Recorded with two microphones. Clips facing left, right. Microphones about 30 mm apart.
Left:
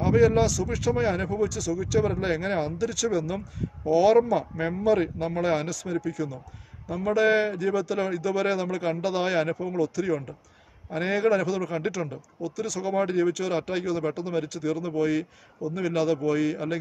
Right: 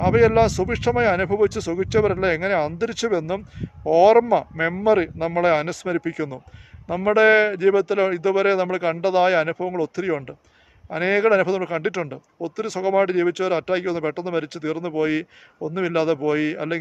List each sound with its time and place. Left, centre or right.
0.0 s speech: right